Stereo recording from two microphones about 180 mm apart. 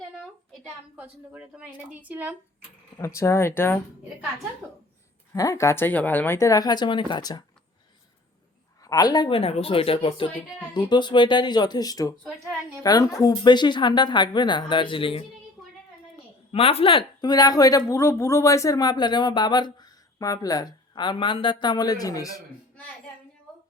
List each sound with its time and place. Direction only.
0.9 s speech: 10° right (ahead or behind)
3.0 s a woman's voice: 15° left (ahead or behind)
5.3 s a woman's voice: 15° left (ahead or behind)
8.8 s a woman's voice: 20° left (ahead or behind)
16.5 s a woman's voice: 30° left (ahead or behind)